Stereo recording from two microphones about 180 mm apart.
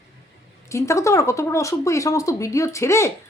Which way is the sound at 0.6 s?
15° left (ahead or behind).